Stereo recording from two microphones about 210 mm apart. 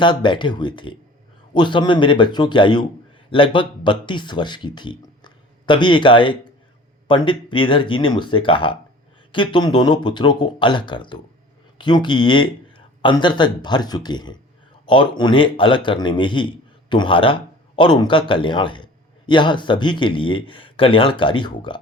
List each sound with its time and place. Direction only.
0.0 s a man's voice: 20° left (ahead or behind)